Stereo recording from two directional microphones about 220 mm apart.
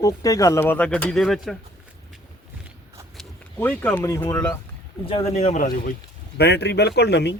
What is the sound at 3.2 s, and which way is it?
Speech, 10° left (ahead or behind).